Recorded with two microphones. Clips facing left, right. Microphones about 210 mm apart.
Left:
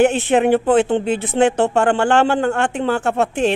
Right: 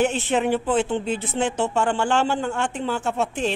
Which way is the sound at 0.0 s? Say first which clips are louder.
Left 7 dB; 60° left (ahead or behind).